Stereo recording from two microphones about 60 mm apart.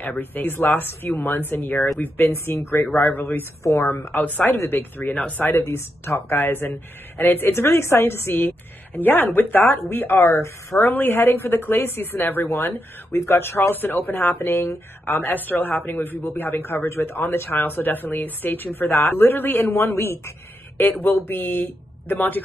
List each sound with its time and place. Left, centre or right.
0.0 s speech: left
10.8 s speech: left